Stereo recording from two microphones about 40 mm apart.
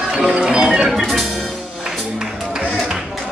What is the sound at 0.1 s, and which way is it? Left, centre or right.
Speech, centre.